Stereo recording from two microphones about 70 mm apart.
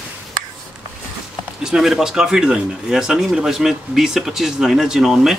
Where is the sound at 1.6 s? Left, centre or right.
Centre.